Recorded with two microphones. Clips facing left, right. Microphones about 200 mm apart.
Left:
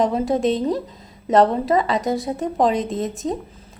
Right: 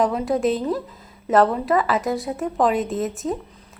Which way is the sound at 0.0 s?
30° left (ahead or behind).